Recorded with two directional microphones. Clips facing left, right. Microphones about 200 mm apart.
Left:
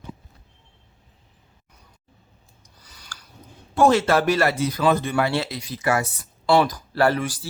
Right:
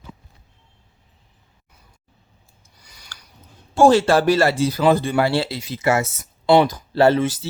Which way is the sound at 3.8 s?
30° right (ahead or behind).